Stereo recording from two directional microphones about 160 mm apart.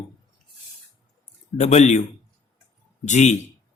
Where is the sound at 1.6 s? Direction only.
45° left (ahead or behind).